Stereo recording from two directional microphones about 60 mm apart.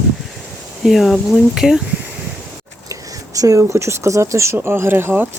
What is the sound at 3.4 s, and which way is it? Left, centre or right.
Speech, right.